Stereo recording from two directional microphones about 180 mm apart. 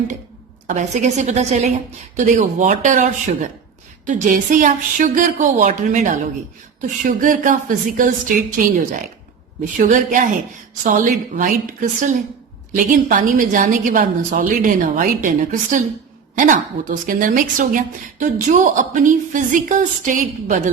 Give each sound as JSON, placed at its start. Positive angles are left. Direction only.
{"t": 0.7, "sound": "a woman's voice", "side_deg": -40}